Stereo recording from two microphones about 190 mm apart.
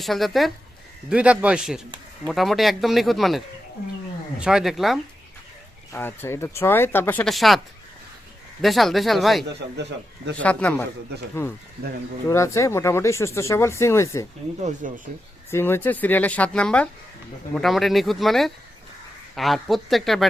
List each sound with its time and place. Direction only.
0.0 s speech: centre (ahead or behind)
5.9 s speech: 10° left (ahead or behind)
8.6 s speech: centre (ahead or behind)
10.4 s speech: 5° left (ahead or behind)
14.8 s speech: 45° right (ahead or behind)
15.4 s speech: 10° left (ahead or behind)